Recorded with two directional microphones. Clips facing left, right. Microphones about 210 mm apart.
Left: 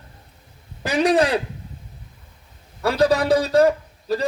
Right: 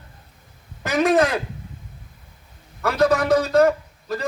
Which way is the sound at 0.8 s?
30° left (ahead or behind).